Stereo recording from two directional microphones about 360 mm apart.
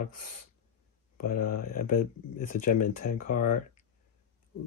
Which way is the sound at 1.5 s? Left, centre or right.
Left.